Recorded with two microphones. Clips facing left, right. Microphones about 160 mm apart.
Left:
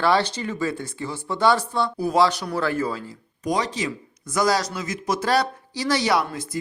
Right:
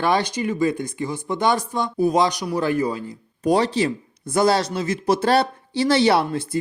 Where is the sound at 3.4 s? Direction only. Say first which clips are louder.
Right 6 dB; 30° right (ahead or behind).